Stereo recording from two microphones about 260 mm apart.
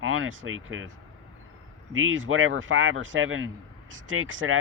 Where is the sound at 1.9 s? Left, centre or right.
Right.